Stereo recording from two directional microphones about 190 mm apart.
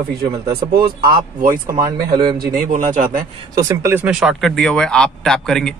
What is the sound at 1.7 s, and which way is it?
Speech, 20° right (ahead or behind).